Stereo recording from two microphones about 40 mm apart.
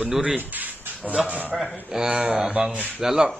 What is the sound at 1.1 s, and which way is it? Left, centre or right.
Speech, right.